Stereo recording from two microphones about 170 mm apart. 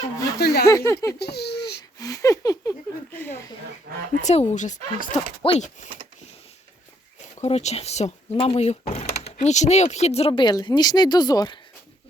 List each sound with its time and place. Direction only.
0.3 s speech: 70° left (ahead or behind)
0.6 s speech: 15° left (ahead or behind)
1.2 s a sound: 75° left (ahead or behind)
2.0 s speech: 20° left (ahead or behind)
3.9 s speech: 60° right (ahead or behind)
4.2 s speech: 40° left (ahead or behind)
5.4 s speech: 40° left (ahead or behind)
7.3 s speech: 40° left (ahead or behind); by 11.6 s 25° left (ahead or behind)